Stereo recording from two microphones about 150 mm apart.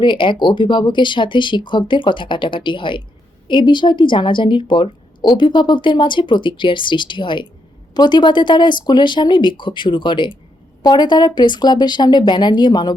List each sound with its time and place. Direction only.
0.0 s speech: 35° left (ahead or behind)